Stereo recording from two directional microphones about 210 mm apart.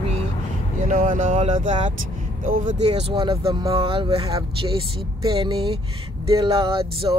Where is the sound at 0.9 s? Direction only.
40° right (ahead or behind).